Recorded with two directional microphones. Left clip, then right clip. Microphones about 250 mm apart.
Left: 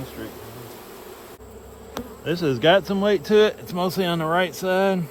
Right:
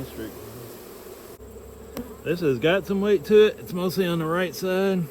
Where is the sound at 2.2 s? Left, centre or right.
Left; by 5.0 s centre.